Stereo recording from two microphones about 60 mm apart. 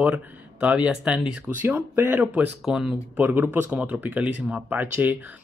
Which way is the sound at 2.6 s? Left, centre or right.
Centre.